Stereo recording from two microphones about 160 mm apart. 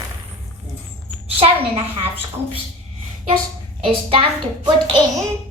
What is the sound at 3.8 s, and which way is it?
Speech, 35° right (ahead or behind).